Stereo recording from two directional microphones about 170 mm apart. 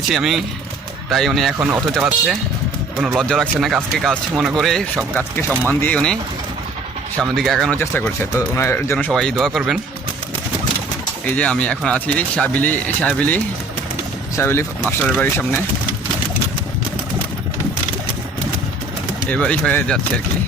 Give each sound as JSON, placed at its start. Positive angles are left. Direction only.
{"t": 0.1, "sound": "speech", "side_deg": 0}
{"t": 7.2, "sound": "speech", "side_deg": 5}
{"t": 7.8, "sound": "speech", "side_deg": 15}
{"t": 11.3, "sound": "speech", "side_deg": 5}
{"t": 19.3, "sound": "speech", "side_deg": 5}